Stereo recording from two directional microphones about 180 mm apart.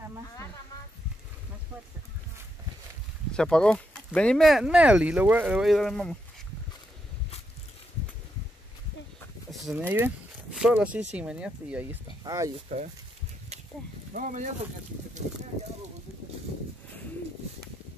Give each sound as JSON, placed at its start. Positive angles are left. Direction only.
{"t": 3.3, "sound": "speech", "side_deg": 5}
{"t": 9.5, "sound": "chicken", "side_deg": 0}
{"t": 9.8, "sound": "speech", "side_deg": -10}
{"t": 12.2, "sound": "speech", "side_deg": -20}
{"t": 12.5, "sound": "speech", "side_deg": -40}
{"t": 14.1, "sound": "speech", "side_deg": -45}